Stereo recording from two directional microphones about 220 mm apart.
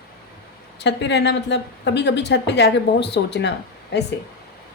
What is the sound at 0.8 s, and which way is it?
A woman's voice, 50° left (ahead or behind).